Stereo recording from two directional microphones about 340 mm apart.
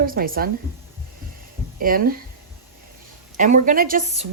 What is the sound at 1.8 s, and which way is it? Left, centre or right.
Speech, right.